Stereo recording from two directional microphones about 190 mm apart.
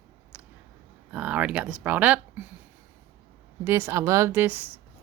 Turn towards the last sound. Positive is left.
turn(degrees=-10)  # may be behind; listen again after turning